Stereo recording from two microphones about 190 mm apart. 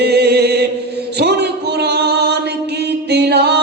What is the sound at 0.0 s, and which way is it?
Chant, 60° right (ahead or behind).